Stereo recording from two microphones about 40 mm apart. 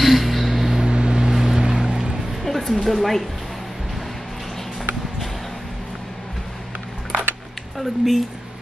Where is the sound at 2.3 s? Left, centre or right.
Centre.